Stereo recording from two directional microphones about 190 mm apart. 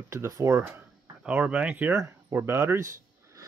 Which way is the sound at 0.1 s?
15° right (ahead or behind).